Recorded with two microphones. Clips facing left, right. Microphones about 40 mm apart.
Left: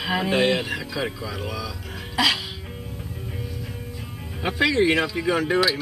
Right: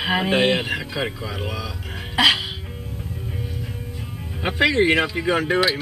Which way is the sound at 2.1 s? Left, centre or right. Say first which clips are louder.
Right 4 dB; right.